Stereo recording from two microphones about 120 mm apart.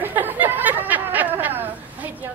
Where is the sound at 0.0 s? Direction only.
15° right (ahead or behind).